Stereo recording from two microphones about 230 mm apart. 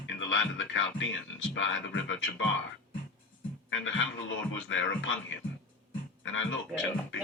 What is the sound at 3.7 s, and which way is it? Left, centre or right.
Speech, left.